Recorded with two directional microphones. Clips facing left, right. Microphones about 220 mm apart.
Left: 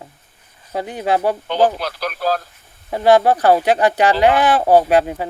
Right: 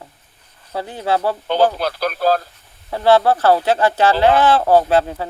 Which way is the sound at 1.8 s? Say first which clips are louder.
Right 4 dB; 30° right (ahead or behind).